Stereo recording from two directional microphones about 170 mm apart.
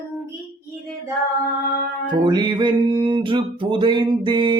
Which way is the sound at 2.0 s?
25° right (ahead or behind).